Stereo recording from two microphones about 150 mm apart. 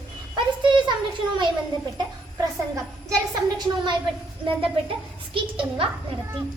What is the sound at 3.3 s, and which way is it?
Speech, 30° right (ahead or behind).